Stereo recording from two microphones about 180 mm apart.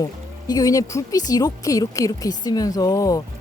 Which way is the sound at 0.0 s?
20° left (ahead or behind).